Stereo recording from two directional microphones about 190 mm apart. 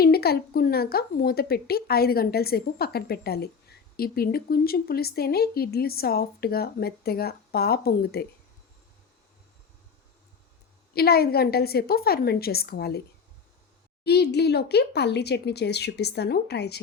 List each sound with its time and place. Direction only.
0.0 s speech: 55° left (ahead or behind)
10.9 s speech: 55° left (ahead or behind)
14.0 s speech: 60° left (ahead or behind)